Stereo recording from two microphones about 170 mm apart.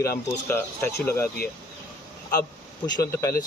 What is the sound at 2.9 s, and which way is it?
Speech, 20° left (ahead or behind).